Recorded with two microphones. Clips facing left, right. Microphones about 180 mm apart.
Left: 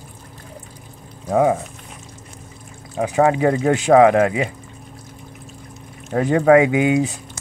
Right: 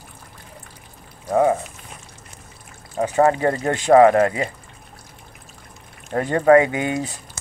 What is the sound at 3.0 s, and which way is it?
Speech, 10° left (ahead or behind).